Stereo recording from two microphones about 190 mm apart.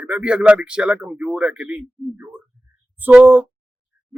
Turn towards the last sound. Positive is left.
turn(degrees=-10)  # may be behind; listen again after turning